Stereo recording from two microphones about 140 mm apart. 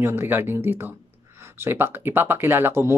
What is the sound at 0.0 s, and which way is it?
Speech, 15° right (ahead or behind).